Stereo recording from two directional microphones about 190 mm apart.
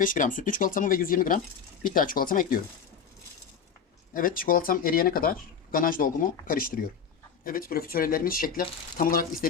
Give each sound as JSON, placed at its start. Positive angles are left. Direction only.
{"t": 0.0, "sound": "speech", "side_deg": 45}
{"t": 4.1, "sound": "speech", "side_deg": 45}